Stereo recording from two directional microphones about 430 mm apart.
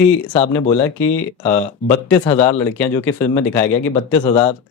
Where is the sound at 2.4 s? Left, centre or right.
Centre.